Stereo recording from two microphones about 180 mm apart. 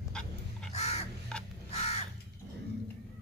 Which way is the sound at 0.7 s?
35° left (ahead or behind).